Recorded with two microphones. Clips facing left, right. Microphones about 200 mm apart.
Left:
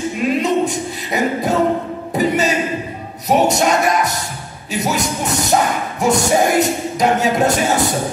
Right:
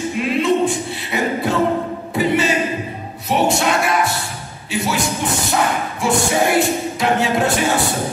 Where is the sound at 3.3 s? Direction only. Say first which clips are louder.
Left 3 dB; 40° left (ahead or behind).